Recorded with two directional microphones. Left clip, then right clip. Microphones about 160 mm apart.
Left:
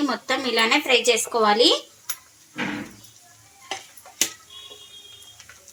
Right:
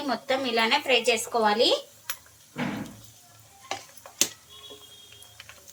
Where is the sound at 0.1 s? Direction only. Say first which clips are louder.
Left 3 dB; 85° left.